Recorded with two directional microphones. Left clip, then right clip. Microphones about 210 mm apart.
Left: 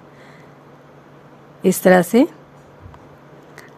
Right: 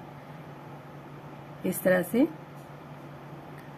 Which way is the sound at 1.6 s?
50° left (ahead or behind).